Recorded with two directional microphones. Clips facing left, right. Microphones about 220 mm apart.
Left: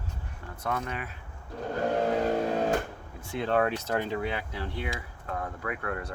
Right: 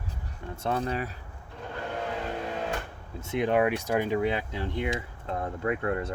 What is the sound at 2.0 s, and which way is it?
Music, 40° left (ahead or behind).